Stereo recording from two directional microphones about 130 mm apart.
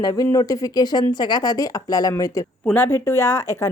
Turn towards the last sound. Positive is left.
turn(degrees=20)  # may be behind; listen again after turning